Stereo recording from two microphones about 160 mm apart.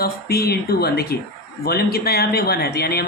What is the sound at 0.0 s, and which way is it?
Speech, 80° left.